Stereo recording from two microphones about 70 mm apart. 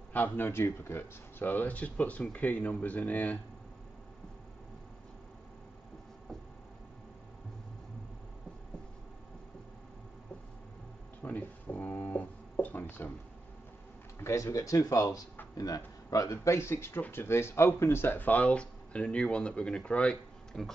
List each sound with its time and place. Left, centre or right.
0.1 s speech: left
0.5 s speech: left
11.2 s a sound: left
14.2 s speech: left; by 20.7 s centre